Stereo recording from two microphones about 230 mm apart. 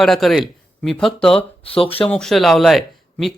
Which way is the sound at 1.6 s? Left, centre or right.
Left.